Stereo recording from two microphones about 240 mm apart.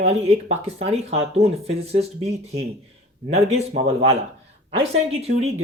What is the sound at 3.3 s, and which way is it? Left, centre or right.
Speech, right.